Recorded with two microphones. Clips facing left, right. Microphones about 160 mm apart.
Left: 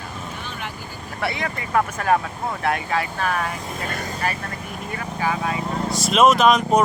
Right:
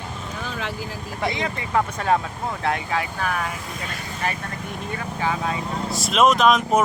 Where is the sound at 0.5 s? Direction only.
90° right.